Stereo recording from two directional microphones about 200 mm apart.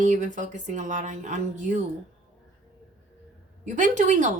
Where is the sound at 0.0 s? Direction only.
40° right (ahead or behind).